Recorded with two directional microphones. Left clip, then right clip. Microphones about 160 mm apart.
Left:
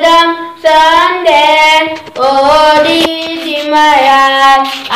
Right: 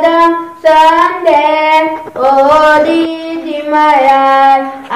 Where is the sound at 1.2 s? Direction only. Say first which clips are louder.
Left 2 dB; centre (ahead or behind).